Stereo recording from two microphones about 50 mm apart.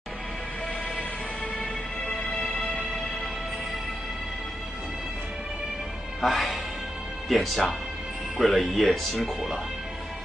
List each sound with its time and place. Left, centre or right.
2.0 s music: left
2.3 s music: centre
6.2 s speech: centre